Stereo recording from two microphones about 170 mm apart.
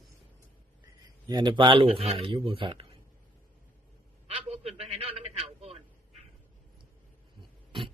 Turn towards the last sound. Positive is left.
turn(degrees=-30)  # may be behind; listen again after turning